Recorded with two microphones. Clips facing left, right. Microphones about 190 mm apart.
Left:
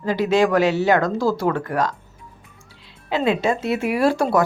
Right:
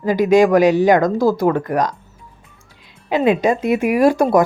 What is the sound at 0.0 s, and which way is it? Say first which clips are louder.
Speech: right 5 dB; 15° right (ahead or behind).